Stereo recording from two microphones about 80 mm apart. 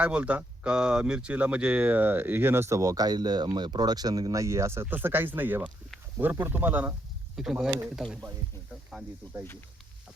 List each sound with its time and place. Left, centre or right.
0.0 s speech: centre
7.3 s a man's voice: centre
9.4 s speech: left